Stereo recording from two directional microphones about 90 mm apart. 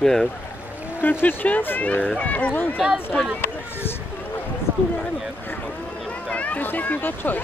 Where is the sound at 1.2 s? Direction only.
20° left (ahead or behind).